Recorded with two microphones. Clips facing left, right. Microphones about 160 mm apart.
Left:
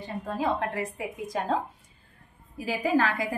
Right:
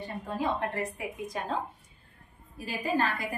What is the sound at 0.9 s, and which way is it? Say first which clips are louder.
Speech: left 4 dB; 90° left.